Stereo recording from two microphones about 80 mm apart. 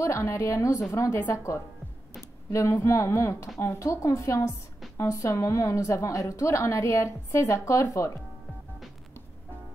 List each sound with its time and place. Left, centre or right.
0.0 s a woman's voice: left